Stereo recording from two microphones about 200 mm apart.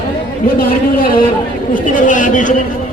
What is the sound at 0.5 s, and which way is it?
A man's voice, 45° left (ahead or behind).